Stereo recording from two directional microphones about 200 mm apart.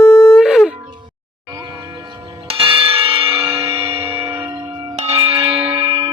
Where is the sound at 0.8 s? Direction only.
20° right (ahead or behind).